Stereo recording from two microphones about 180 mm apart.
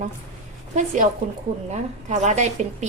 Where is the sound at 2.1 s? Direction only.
40° right (ahead or behind).